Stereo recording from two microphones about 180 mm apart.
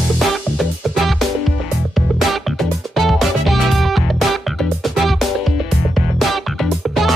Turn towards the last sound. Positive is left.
turn(degrees=0)  # may be behind; listen again after turning